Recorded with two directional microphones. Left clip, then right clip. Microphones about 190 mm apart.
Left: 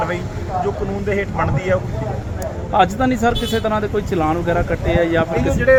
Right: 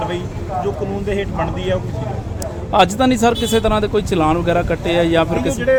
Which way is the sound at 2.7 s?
35° right (ahead or behind).